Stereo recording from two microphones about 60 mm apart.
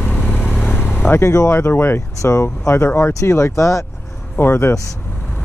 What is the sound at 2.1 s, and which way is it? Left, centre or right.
Speech, left.